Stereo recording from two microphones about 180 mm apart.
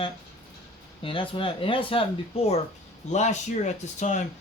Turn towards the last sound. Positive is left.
turn(degrees=40)  # may be behind; listen again after turning